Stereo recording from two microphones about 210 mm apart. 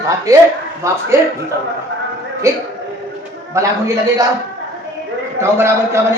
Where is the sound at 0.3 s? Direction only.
15° right (ahead or behind).